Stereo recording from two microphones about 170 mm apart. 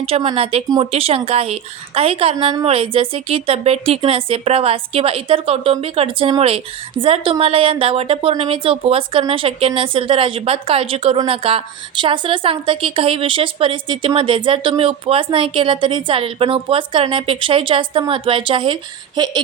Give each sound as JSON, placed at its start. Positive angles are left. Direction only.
{"t": 0.0, "sound": "a woman's voice", "side_deg": -30}